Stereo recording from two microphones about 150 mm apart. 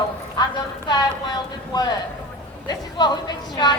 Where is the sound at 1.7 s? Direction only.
25° left (ahead or behind).